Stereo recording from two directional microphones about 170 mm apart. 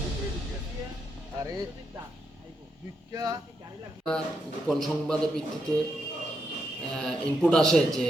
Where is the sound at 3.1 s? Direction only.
20° right (ahead or behind).